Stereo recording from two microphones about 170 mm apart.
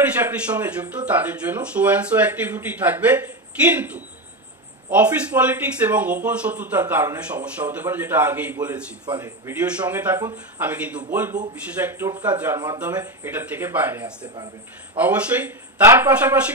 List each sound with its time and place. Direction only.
0.2 s speech: 10° right (ahead or behind)
12.5 s speech: 25° right (ahead or behind)